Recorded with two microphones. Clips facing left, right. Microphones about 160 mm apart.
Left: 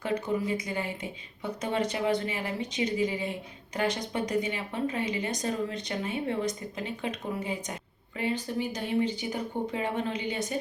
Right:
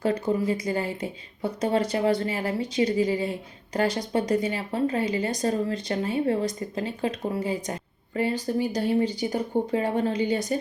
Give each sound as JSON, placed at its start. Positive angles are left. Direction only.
{"t": 0.0, "sound": "speech", "side_deg": -35}